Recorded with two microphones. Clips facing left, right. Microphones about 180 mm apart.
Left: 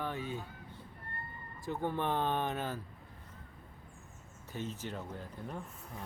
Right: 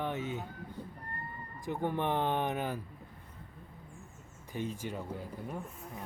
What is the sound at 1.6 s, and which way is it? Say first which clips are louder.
Speech: right 2 dB; 15° right (ahead or behind).